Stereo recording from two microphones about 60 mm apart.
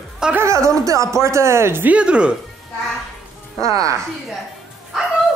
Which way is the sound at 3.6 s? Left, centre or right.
Right.